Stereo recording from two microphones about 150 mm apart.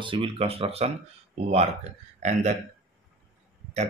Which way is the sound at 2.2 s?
50° right (ahead or behind).